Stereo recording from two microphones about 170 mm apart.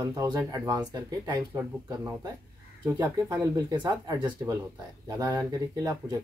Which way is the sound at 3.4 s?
20° right (ahead or behind).